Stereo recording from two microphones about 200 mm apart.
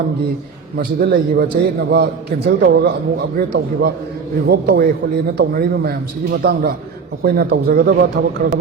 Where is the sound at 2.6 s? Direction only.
55° right (ahead or behind).